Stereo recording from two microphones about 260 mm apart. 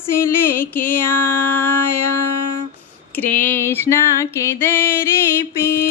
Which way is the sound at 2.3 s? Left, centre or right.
Left.